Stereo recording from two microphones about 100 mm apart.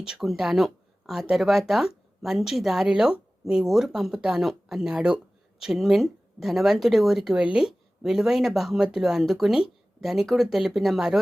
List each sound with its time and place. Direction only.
0.0 s speech: 5° right (ahead or behind)